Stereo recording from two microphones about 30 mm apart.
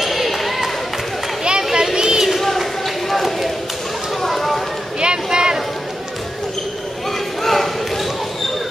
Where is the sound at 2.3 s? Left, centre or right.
Centre.